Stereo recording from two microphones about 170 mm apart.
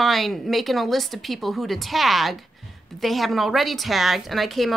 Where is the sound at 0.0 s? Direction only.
Centre (ahead or behind).